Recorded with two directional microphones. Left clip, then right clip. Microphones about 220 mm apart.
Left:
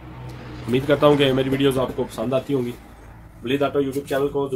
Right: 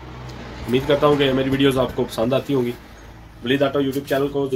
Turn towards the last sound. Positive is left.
turn(degrees=0)  # may be behind; listen again after turning